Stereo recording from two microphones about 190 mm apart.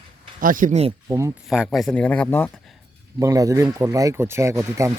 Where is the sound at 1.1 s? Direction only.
15° right (ahead or behind).